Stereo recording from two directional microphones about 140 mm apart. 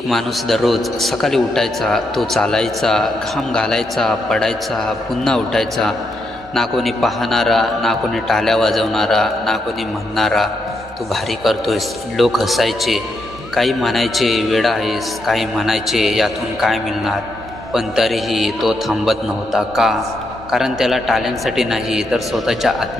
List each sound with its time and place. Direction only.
0.1 s a man's voice: centre (ahead or behind)